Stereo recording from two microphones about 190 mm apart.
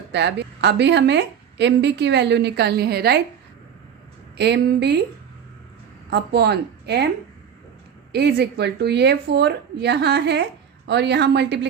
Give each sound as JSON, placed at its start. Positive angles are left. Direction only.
{"t": 0.1, "sound": "a woman's voice", "side_deg": -65}
{"t": 4.4, "sound": "a woman's voice", "side_deg": -60}
{"t": 6.1, "sound": "a woman's voice", "side_deg": -60}
{"t": 8.1, "sound": "a woman's voice", "side_deg": -60}